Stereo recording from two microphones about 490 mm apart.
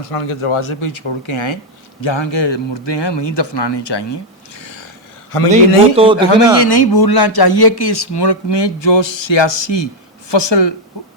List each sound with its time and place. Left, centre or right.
0.0 s speech: left
5.3 s a man's voice: left
6.1 s speech: left